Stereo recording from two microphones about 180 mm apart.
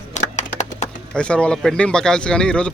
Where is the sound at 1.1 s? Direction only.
5° left (ahead or behind).